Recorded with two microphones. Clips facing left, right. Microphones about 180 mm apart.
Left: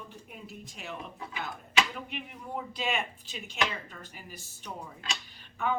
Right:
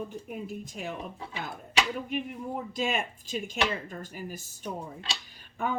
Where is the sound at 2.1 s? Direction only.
45° right (ahead or behind).